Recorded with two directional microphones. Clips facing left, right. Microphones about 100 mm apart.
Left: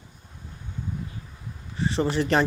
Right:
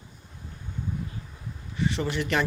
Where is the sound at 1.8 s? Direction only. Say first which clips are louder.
Left 3 dB; 35° left (ahead or behind).